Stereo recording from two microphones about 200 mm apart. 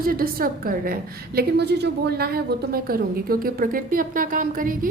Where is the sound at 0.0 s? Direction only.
45° right (ahead or behind).